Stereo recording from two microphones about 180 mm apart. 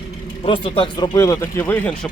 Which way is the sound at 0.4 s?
30° left (ahead or behind).